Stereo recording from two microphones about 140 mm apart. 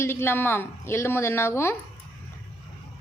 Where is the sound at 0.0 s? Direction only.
15° left (ahead or behind).